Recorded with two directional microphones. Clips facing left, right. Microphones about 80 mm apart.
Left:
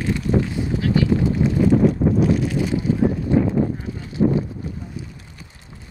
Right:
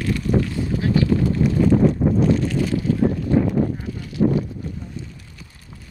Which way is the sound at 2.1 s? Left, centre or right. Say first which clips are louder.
Even; centre.